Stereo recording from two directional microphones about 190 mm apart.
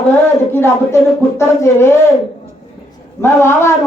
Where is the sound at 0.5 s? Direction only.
15° left (ahead or behind).